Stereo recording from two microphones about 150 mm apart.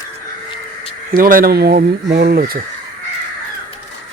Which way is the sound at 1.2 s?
70° right (ahead or behind).